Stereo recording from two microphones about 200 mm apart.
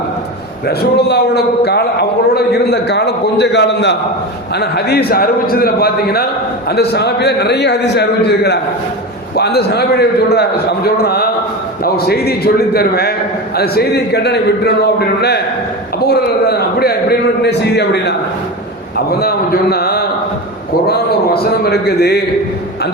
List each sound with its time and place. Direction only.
0.8 s a man's voice: 55° left (ahead or behind)